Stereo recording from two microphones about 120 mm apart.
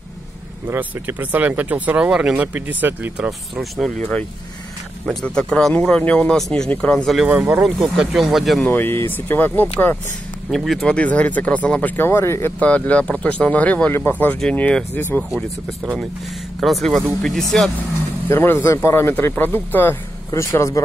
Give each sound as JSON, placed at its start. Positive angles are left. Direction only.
{"t": 0.7, "sound": "speech", "side_deg": -15}
{"t": 3.3, "sound": "speech", "side_deg": 0}
{"t": 5.0, "sound": "speech", "side_deg": 10}
{"t": 7.2, "sound": "speech", "side_deg": -10}
{"t": 8.6, "sound": "speech", "side_deg": 20}
{"t": 10.5, "sound": "speech", "side_deg": 0}
{"t": 16.5, "sound": "speech", "side_deg": 0}
{"t": 18.3, "sound": "speech", "side_deg": 20}